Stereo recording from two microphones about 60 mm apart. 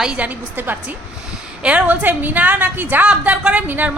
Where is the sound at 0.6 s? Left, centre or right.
Right.